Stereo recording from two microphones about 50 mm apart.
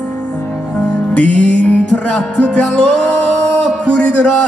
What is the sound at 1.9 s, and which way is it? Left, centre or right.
Music, centre.